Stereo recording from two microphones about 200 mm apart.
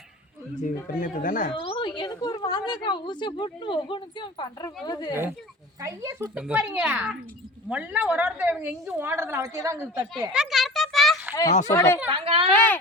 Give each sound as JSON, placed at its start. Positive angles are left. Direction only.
{"t": 0.9, "sound": "speech", "side_deg": 40}
{"t": 1.6, "sound": "a woman's voice", "side_deg": 25}
{"t": 5.8, "sound": "a woman's voice", "side_deg": -15}
{"t": 10.3, "sound": "a sound", "side_deg": 0}
{"t": 11.7, "sound": "speech", "side_deg": 15}
{"t": 12.1, "sound": "speech", "side_deg": -25}
{"t": 12.5, "sound": "speech", "side_deg": 10}